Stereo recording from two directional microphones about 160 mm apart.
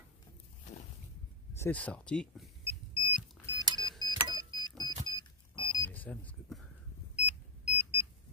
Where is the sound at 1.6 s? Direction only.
10° left (ahead or behind).